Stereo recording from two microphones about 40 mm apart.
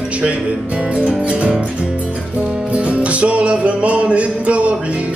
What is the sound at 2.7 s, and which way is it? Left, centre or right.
Music, right.